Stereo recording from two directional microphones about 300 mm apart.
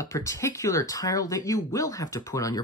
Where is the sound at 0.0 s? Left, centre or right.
Centre.